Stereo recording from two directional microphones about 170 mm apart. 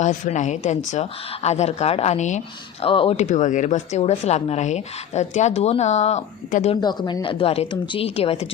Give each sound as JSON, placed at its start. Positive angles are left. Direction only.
{"t": 0.0, "sound": "speech", "side_deg": 45}
{"t": 2.8, "sound": "speech", "side_deg": 30}
{"t": 6.8, "sound": "speech", "side_deg": 25}